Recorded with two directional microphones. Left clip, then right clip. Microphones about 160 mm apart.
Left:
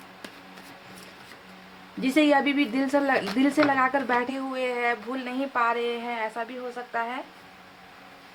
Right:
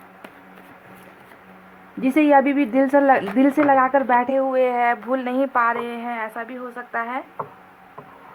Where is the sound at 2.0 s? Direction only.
20° right (ahead or behind).